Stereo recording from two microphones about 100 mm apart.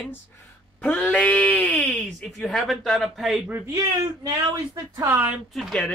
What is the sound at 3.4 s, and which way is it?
Speech, 20° right (ahead or behind).